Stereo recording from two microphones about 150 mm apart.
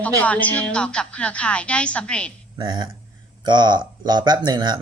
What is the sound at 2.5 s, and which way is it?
Speech, 30° right (ahead or behind).